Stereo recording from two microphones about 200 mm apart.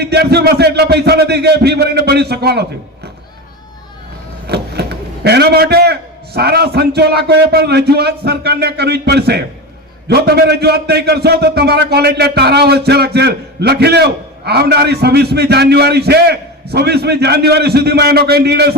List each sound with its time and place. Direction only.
0.0 s a man's voice: 55° right (ahead or behind)
4.4 s a man's voice: 55° right (ahead or behind)